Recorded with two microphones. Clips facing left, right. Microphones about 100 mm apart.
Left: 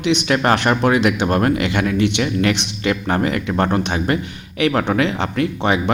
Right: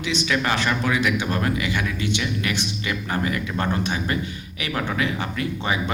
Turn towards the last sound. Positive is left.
turn(degrees=65)  # may be behind; listen again after turning